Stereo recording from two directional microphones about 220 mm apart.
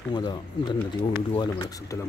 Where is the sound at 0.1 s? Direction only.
20° left (ahead or behind).